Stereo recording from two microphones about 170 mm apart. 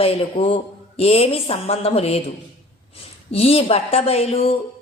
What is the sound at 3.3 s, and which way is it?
Speech, 35° left (ahead or behind).